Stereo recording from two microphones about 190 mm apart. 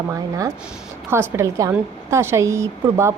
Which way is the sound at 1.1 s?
15° right (ahead or behind).